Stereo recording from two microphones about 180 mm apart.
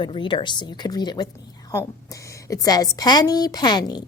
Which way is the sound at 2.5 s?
20° left (ahead or behind).